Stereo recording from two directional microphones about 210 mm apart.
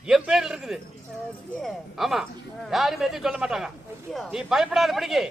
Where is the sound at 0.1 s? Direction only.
Centre (ahead or behind).